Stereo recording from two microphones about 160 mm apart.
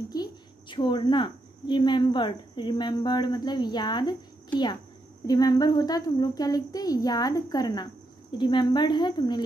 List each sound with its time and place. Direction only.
0.1 s a woman's voice: 25° left (ahead or behind)
5.2 s speech: 25° left (ahead or behind)